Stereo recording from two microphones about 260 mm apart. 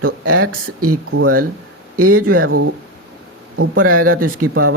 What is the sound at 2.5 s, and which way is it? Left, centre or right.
Speech, right.